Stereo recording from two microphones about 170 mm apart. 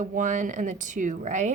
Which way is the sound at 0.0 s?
50° right (ahead or behind).